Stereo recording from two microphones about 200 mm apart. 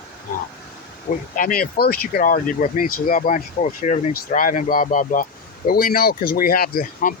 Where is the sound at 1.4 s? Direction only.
45° left (ahead or behind).